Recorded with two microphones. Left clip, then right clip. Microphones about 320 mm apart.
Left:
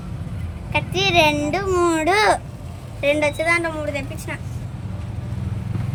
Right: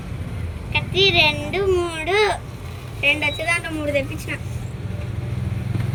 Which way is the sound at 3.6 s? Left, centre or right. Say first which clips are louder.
Right 2 dB; centre.